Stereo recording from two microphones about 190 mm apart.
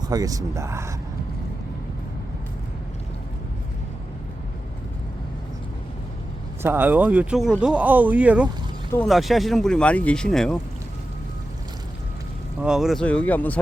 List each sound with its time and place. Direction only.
0.0 s speech: 20° right (ahead or behind)
6.6 s speech: 10° right (ahead or behind)
12.6 s speech: centre (ahead or behind)